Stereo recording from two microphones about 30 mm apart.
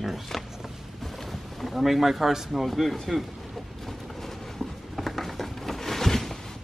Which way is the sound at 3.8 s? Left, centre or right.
Centre.